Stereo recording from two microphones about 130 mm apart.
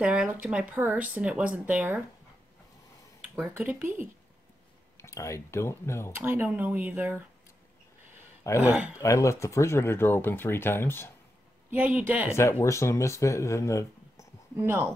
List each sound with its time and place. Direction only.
0.0 s speech: 10° right (ahead or behind)
3.2 s a sound: 5° right (ahead or behind)
3.5 s speech: 15° right (ahead or behind)
5.0 s speech: 20° left (ahead or behind)
6.1 s speech: 15° right (ahead or behind)
8.5 s speech: 10° right (ahead or behind)
8.9 s speech: 25° left (ahead or behind)
11.7 s speech: 15° right (ahead or behind)
12.4 s speech: 20° left (ahead or behind)
14.6 s speech: 20° right (ahead or behind)